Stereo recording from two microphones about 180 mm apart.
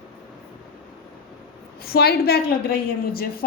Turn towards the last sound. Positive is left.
turn(degrees=55)  # may be behind; listen again after turning